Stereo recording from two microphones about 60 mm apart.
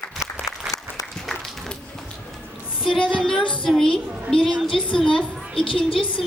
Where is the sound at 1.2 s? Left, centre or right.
Centre.